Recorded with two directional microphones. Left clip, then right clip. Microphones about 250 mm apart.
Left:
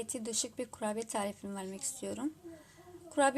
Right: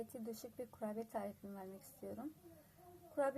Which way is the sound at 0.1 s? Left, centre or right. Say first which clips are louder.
Left 11 dB; left.